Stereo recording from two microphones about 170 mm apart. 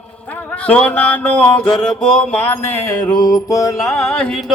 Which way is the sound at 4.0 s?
5° left (ahead or behind).